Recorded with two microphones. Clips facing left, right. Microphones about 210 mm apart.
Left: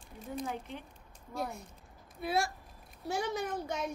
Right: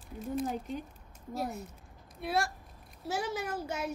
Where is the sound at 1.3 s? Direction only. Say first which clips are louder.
Right 2 dB; 5° right (ahead or behind).